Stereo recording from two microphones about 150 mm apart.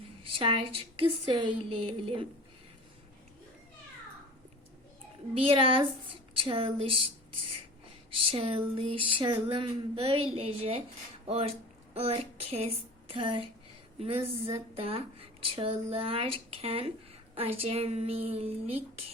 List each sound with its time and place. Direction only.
0.3 s speech: 35° right (ahead or behind)
5.3 s speech: 35° right (ahead or behind)
8.3 s speech: 35° right (ahead or behind)